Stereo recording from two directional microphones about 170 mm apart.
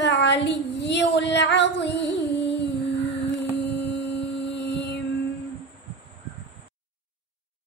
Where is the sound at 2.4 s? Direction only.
90° left.